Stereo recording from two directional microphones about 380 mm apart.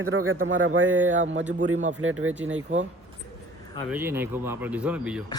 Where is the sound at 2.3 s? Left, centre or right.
Centre.